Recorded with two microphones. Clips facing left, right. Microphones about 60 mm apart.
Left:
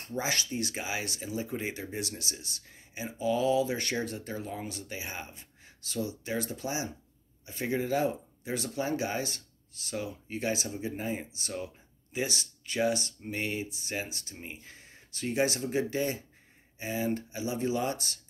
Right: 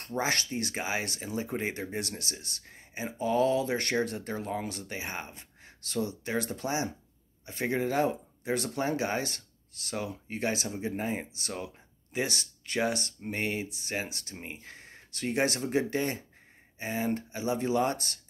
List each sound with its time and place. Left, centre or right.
0.0 s speech: right